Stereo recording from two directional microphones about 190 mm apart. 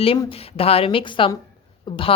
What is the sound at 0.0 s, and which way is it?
A woman's voice, 30° left (ahead or behind).